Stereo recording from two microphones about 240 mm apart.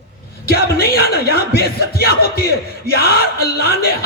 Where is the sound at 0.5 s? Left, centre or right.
Left.